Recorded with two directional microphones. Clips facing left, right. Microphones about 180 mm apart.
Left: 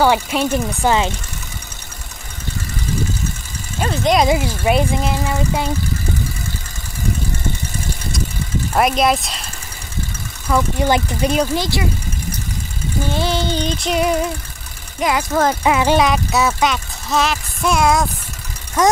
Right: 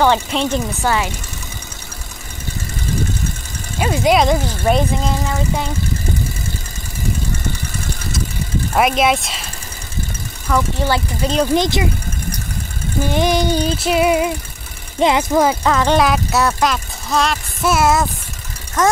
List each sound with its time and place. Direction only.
0.0 s speech: 5° left (ahead or behind)
0.8 s speech: 20° left (ahead or behind)
3.8 s music: 10° right (ahead or behind)
4.2 s speech: 5° left (ahead or behind)
8.7 s speech: centre (ahead or behind)
10.5 s speech: 15° left (ahead or behind)
11.5 s speech: 20° right (ahead or behind)
13.1 s music: 15° right (ahead or behind)
15.0 s speech: 25° right (ahead or behind)
15.6 s speech: 10° left (ahead or behind)
18.8 s speech: 10° left (ahead or behind)